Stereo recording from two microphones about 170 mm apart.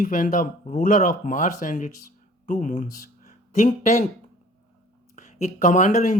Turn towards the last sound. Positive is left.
turn(degrees=50)  # may be behind; listen again after turning